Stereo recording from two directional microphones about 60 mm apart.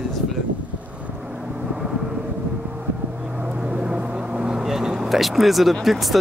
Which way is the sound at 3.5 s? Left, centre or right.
Centre.